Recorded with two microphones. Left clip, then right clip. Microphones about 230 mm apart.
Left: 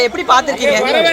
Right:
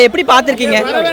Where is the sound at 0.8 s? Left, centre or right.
Right.